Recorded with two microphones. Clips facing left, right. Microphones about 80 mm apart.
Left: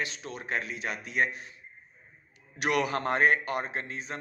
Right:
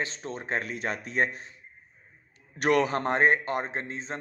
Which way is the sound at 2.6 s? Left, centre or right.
Right.